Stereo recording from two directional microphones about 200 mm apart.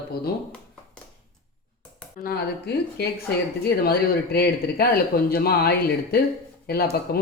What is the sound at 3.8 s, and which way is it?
Speech, 50° left (ahead or behind).